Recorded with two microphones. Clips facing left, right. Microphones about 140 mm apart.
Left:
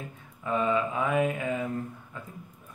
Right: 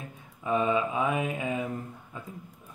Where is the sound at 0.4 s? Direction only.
20° right (ahead or behind).